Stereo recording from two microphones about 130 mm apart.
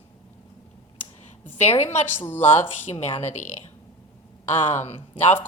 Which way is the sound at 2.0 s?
15° left (ahead or behind).